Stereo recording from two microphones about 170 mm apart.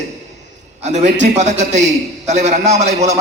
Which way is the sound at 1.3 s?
40° right (ahead or behind).